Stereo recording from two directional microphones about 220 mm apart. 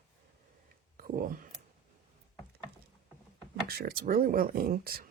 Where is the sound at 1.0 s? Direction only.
40° right (ahead or behind).